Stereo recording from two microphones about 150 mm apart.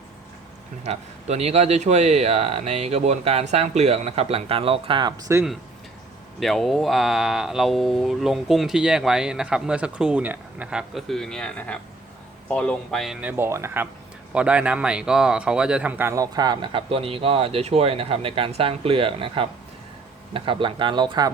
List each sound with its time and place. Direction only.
0.9 s speech: 45° right (ahead or behind)
6.4 s speech: centre (ahead or behind)
13.2 s speech: 15° right (ahead or behind); by 21.2 s 30° right (ahead or behind)